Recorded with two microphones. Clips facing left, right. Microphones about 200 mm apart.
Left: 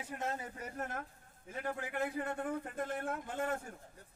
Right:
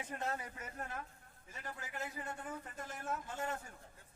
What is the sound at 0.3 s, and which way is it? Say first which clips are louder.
Speech: left 2 dB; 25° left (ahead or behind).